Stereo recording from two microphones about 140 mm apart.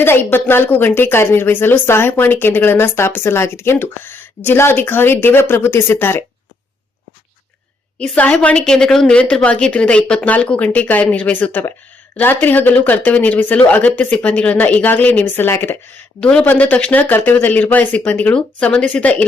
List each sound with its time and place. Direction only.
0.0 s a woman's voice: 15° left (ahead or behind)
7.9 s a woman's voice: 10° left (ahead or behind)